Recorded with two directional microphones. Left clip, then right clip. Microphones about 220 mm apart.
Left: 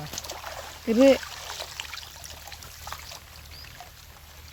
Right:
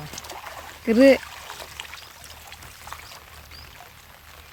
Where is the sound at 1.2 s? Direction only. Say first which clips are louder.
Left 1 dB; 20° left (ahead or behind).